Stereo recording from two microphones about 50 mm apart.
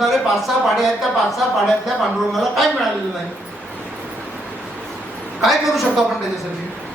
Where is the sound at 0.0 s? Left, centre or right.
Centre.